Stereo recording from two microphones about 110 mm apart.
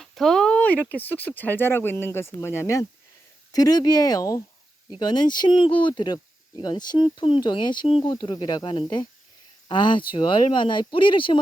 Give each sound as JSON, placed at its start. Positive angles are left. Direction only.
{"t": 0.0, "sound": "speech", "side_deg": 0}
{"t": 3.5, "sound": "speech", "side_deg": 35}